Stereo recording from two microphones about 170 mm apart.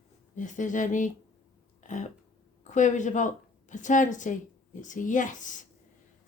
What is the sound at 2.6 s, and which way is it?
A woman's voice, 45° left (ahead or behind).